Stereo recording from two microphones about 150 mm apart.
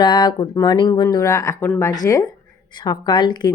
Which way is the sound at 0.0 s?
30° left (ahead or behind).